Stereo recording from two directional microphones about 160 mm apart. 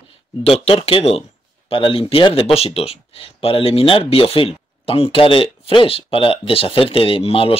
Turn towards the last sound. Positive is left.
turn(degrees=35)  # may be behind; listen again after turning